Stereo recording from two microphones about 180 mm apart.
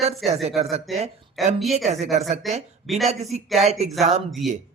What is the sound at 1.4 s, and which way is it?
Speech, centre (ahead or behind).